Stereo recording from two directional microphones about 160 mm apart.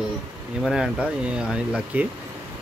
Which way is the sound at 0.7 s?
5° right (ahead or behind).